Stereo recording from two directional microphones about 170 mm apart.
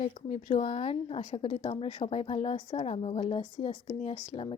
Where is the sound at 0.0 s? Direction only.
45° left (ahead or behind).